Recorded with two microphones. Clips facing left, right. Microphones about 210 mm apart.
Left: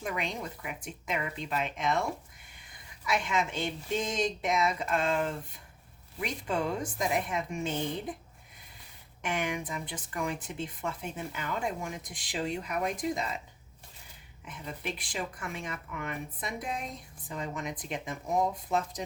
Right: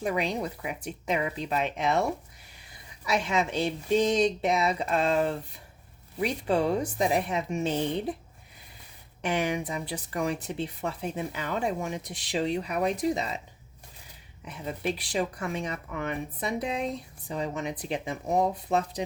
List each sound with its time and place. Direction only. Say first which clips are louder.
0.0 s speech: right 6 dB; 35° right (ahead or behind)
3.1 s speech: right 3 dB; 35° right (ahead or behind)
9.2 s speech: right 5 dB; 35° right (ahead or behind)
14.4 s speech: right 7 dB; 40° right (ahead or behind)